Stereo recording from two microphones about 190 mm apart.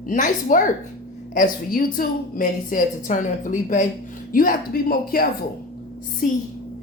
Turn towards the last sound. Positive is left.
turn(degrees=45)  # may be behind; listen again after turning